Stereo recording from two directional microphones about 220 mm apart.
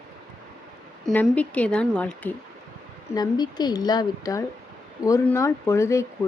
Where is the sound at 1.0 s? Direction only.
5° left (ahead or behind).